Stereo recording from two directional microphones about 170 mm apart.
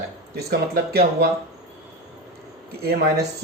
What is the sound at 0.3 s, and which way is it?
Speech, 65° right (ahead or behind).